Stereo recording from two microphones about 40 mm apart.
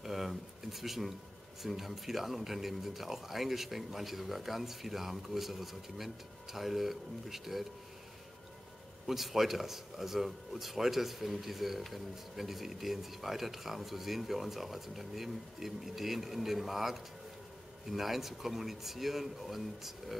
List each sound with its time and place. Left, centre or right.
0.0 s a sound: centre
1.6 s speech: centre
9.0 s speech: centre